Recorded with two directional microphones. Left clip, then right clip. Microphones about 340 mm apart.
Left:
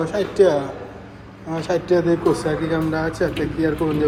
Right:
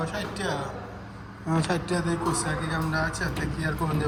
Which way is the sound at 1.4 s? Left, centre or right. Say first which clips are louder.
Left 5 dB; centre.